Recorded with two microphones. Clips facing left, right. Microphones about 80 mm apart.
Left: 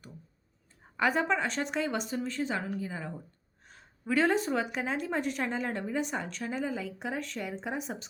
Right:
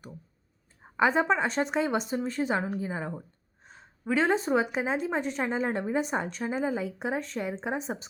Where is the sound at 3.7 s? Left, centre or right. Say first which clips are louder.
Right 1 dB; centre.